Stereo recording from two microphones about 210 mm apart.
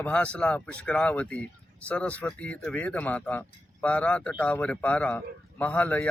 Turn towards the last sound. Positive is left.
turn(degrees=5)  # may be behind; listen again after turning